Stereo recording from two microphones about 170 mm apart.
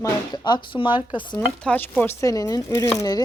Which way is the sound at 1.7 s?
10° left (ahead or behind).